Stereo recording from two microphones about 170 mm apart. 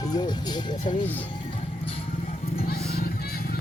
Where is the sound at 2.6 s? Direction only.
60° left (ahead or behind).